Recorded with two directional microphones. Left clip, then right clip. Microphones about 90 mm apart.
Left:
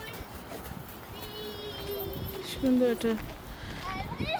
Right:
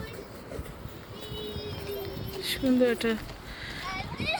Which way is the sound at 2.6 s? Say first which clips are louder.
Right 1 dB; 10° right (ahead or behind).